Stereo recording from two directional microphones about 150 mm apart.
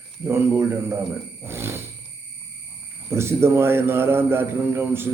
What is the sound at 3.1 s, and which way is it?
A man's voice, 15° right (ahead or behind).